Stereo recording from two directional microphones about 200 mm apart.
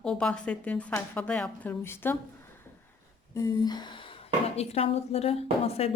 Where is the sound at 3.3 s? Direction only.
20° left (ahead or behind).